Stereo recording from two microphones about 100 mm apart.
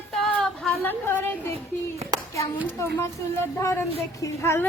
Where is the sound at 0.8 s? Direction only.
20° left (ahead or behind).